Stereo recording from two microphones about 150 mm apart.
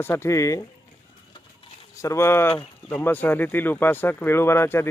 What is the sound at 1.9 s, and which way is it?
Speech, 20° left (ahead or behind).